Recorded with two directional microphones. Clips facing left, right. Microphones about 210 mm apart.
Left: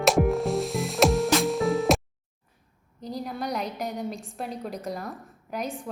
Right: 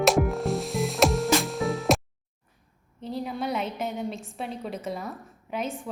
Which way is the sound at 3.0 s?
40° left (ahead or behind).